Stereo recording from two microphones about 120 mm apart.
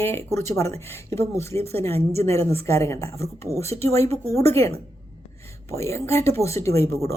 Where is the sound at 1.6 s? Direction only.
60° right (ahead or behind).